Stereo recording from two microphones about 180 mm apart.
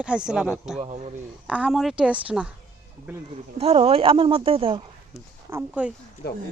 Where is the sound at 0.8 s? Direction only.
40° right (ahead or behind).